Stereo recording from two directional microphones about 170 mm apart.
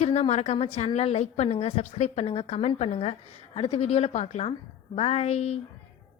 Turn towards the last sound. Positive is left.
turn(degrees=40)  # may be behind; listen again after turning